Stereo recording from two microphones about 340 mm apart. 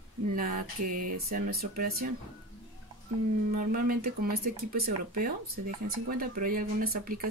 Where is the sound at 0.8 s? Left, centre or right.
Right.